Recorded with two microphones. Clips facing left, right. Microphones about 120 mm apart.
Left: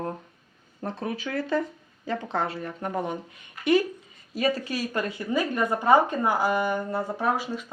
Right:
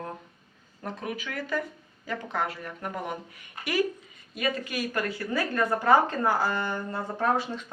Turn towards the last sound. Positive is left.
turn(degrees=10)  # may be behind; listen again after turning